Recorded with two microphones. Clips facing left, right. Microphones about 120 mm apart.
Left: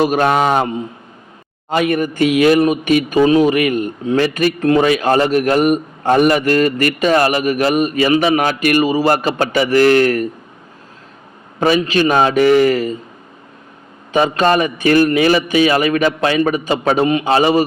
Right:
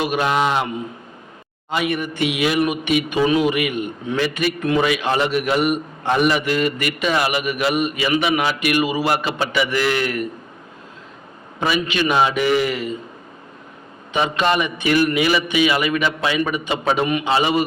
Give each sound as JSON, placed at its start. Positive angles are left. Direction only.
{"t": 0.0, "sound": "a man's voice", "side_deg": 45}
{"t": 1.7, "sound": "a man's voice", "side_deg": 45}
{"t": 11.6, "sound": "a man's voice", "side_deg": 40}
{"t": 14.1, "sound": "a man's voice", "side_deg": 40}